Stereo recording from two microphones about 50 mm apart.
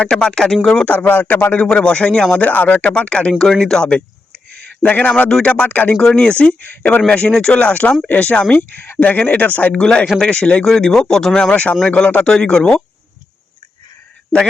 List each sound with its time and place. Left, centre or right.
0.1 s speech: centre
0.9 s speech: left
1.5 s speech: centre
2.3 s speech: left
5.6 s speech: left
6.0 s speech: centre
6.6 s speech: left
7.3 s speech: centre
7.5 s speech: left
8.5 s speech: left
9.7 s speech: centre
11.5 s speech: left